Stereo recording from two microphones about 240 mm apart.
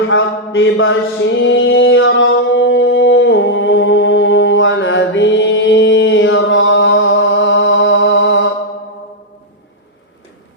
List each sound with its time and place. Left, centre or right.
0.1 s mantra: left